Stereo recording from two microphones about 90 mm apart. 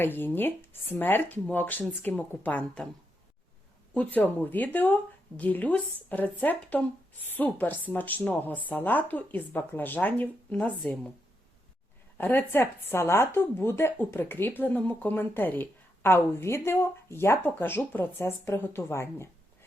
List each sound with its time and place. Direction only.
0.0 s speech: 25° left (ahead or behind)
3.9 s speech: 20° left (ahead or behind)
12.1 s speech: 25° left (ahead or behind)